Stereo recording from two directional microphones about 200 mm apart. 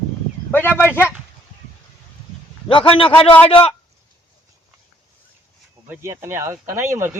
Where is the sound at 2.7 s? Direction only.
25° left (ahead or behind).